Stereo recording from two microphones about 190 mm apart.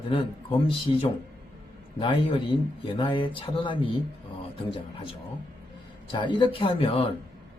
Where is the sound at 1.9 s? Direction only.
25° left (ahead or behind).